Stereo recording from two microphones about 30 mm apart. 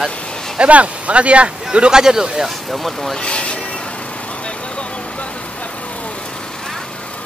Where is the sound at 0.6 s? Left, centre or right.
Right.